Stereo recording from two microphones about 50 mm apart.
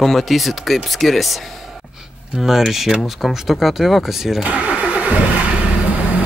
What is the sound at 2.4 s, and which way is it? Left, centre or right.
Speech, centre.